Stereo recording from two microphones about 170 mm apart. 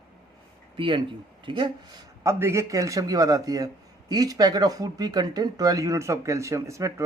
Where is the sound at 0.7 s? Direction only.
30° right (ahead or behind).